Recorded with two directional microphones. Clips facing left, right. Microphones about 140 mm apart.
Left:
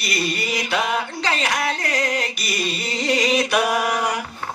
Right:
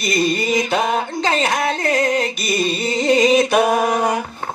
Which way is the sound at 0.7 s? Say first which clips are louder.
Right 4 dB; 40° right (ahead or behind).